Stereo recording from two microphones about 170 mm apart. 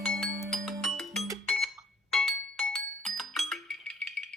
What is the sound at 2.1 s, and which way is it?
Music, centre (ahead or behind).